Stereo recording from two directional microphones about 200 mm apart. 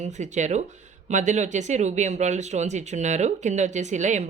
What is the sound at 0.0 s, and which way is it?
Speech, 35° right (ahead or behind).